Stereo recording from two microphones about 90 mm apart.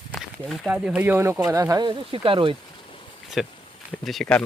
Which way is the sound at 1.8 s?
70° right (ahead or behind).